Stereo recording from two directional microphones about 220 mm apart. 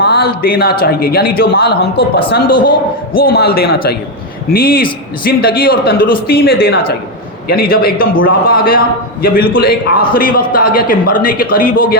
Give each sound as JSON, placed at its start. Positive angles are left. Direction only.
{"t": 0.0, "sound": "a man's voice", "side_deg": 45}
{"t": 2.0, "sound": "a woman's voice", "side_deg": 25}
{"t": 3.1, "sound": "a man's voice", "side_deg": 40}